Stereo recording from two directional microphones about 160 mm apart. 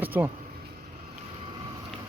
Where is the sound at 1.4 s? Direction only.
35° right (ahead or behind).